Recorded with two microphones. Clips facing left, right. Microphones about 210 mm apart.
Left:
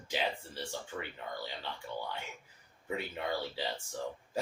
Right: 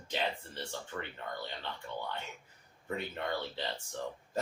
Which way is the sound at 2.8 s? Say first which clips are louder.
Even; 5° left (ahead or behind).